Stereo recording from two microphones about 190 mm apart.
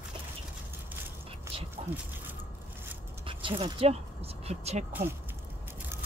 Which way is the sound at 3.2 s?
30° right (ahead or behind).